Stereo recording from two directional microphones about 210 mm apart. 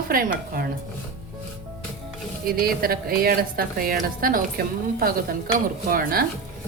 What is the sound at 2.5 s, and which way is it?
A woman's voice, 45° right (ahead or behind).